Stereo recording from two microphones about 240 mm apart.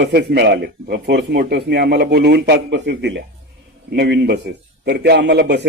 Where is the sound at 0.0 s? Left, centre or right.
Right.